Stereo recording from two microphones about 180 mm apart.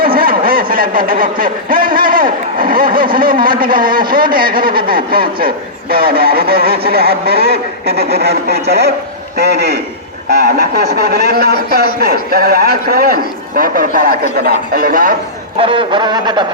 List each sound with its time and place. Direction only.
0.2 s a sound: 55° right (ahead or behind)
3.2 s a man's voice: 55° right (ahead or behind)
7.5 s speech: 35° right (ahead or behind)
9.4 s a man's voice: 65° right (ahead or behind)
15.5 s speech: 30° right (ahead or behind)